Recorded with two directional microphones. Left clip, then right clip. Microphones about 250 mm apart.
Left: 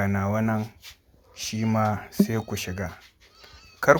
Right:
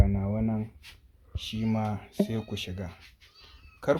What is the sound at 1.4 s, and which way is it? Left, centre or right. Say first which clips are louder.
Speech: left 6 dB; centre.